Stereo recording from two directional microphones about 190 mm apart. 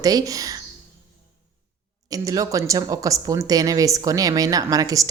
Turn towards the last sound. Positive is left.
turn(degrees=-20)  # may be behind; listen again after turning